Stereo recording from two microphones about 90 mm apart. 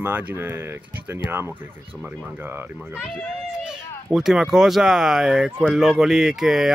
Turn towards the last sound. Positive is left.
turn(degrees=-5)  # may be behind; listen again after turning